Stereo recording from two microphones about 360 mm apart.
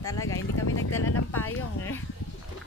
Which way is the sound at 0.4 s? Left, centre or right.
Left.